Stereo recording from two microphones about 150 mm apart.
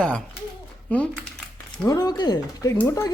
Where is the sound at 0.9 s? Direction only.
10° left (ahead or behind).